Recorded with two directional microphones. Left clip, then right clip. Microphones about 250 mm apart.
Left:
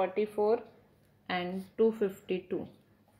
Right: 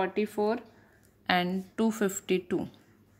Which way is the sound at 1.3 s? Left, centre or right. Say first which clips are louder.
Right 7 dB; right.